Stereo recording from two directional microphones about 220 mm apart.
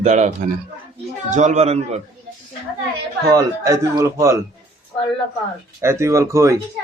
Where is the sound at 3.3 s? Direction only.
15° right (ahead or behind).